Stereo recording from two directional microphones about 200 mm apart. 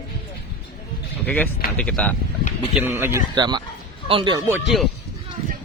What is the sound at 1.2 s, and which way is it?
Speech, 10° left (ahead or behind).